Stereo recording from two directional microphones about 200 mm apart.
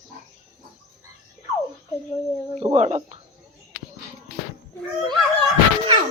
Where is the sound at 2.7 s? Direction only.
30° right (ahead or behind).